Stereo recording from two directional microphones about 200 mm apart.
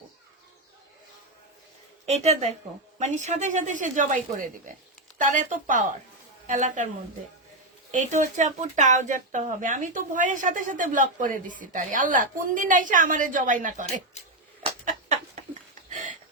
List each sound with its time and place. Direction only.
2.0 s speech: 35° right (ahead or behind)
7.9 s speech: 40° right (ahead or behind)
15.9 s a sound: 40° right (ahead or behind)